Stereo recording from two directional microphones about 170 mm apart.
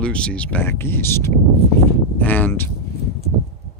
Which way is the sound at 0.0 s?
5° left (ahead or behind).